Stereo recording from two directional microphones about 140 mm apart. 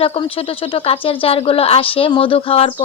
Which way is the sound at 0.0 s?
40° left (ahead or behind).